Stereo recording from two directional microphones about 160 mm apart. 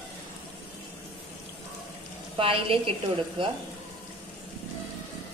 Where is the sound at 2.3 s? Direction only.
35° right (ahead or behind).